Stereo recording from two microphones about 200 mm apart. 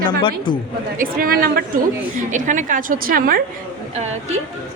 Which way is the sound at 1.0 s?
45° right (ahead or behind).